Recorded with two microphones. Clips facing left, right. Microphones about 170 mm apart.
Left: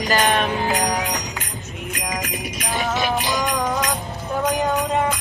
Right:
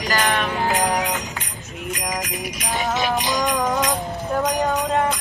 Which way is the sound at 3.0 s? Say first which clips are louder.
Even; 20° right (ahead or behind).